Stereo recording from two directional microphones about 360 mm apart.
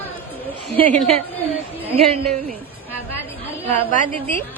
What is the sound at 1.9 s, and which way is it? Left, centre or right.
Speech, right.